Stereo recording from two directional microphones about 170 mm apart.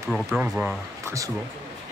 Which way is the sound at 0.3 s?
5° right (ahead or behind).